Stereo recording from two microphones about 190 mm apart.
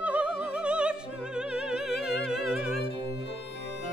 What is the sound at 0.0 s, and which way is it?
Opera, 5° right (ahead or behind).